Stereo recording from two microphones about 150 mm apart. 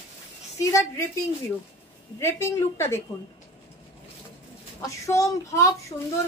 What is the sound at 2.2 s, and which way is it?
Speech, 15° left (ahead or behind).